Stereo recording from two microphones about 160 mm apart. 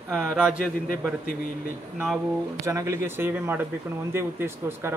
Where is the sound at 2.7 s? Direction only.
20° right (ahead or behind).